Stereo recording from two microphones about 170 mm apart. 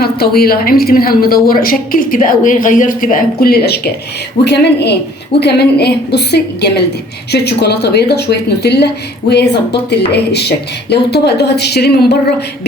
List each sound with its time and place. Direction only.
0.0 s a woman's voice: 65° left (ahead or behind)
9.9 s speech: 75° left (ahead or behind)